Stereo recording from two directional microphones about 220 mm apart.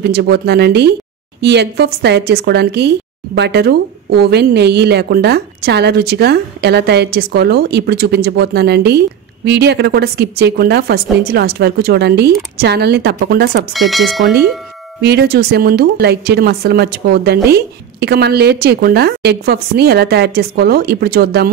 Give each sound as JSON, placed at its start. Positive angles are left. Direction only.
{"t": 0.1, "sound": "speech", "side_deg": -45}
{"t": 13.7, "sound": "speech", "side_deg": 0}
{"t": 15.0, "sound": "speech", "side_deg": -45}